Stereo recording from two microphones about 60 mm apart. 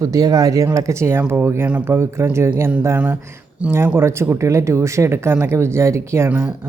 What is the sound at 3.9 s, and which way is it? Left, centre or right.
Speech, right.